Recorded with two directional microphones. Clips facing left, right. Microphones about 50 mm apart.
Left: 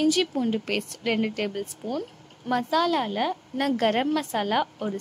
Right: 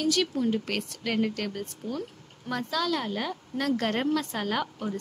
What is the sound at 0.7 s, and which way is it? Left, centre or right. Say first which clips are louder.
Speech: left 4 dB; centre.